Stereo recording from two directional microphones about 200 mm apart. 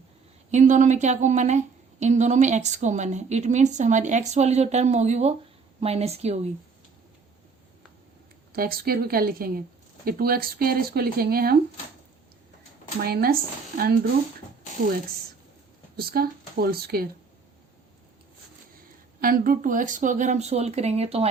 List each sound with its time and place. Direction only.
0.5 s a woman's voice: 35° right (ahead or behind)
8.5 s speech: 50° right (ahead or behind)
13.0 s speech: 50° right (ahead or behind)
16.0 s speech: 50° right (ahead or behind)
19.2 s a woman's voice: 45° right (ahead or behind)